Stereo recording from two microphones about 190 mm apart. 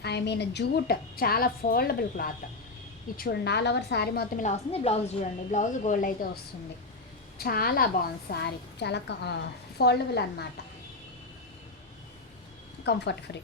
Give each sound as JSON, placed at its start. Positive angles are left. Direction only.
{"t": 0.0, "sound": "a woman's voice", "side_deg": 60}
{"t": 4.4, "sound": "a woman's voice", "side_deg": 35}
{"t": 7.3, "sound": "a woman's voice", "side_deg": 55}
{"t": 12.8, "sound": "a woman's voice", "side_deg": 60}